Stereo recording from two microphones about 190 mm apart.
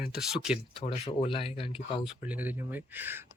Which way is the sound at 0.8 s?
35° left (ahead or behind).